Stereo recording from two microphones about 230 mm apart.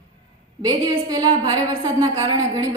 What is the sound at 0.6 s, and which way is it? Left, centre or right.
A woman's voice, centre.